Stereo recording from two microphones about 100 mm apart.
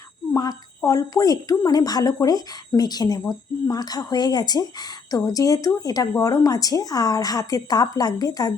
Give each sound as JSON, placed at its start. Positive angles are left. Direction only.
{"t": 0.3, "sound": "a woman's voice", "side_deg": 35}